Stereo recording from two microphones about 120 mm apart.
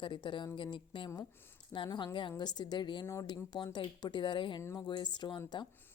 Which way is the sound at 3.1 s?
30° left (ahead or behind).